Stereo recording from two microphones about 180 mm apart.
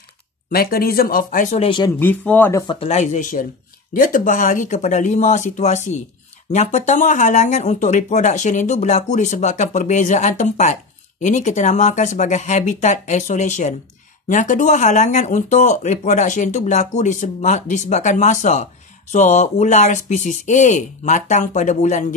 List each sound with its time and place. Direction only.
0.5 s speech: 55° left (ahead or behind); by 1.9 s 30° left (ahead or behind)
2.0 s speech: 10° left (ahead or behind)
2.6 s speech: 25° left (ahead or behind)
2.9 s speech: 40° left (ahead or behind)